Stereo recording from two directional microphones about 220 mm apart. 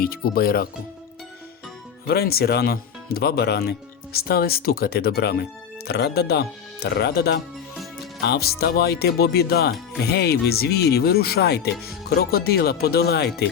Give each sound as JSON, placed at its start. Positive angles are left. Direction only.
{"t": 0.0, "sound": "speech", "side_deg": 45}
{"t": 2.0, "sound": "speech", "side_deg": 45}